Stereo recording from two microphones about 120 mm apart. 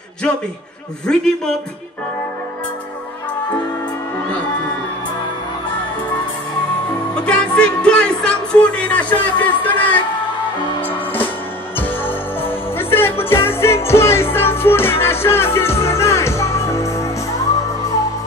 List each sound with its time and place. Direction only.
1.0 s a man's voice: 5° left (ahead or behind)
7.2 s speech: 10° left (ahead or behind)
11.7 s music: 20° left (ahead or behind)